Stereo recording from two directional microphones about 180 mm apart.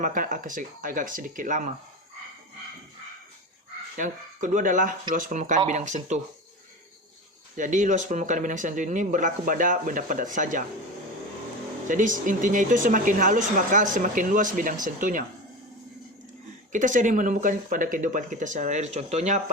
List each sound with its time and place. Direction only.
0.0 s speech: 45° right (ahead or behind)
3.9 s speech: 45° right (ahead or behind)
7.5 s speech: 45° right (ahead or behind)
11.9 s speech: 45° right (ahead or behind)
16.7 s speech: 45° right (ahead or behind)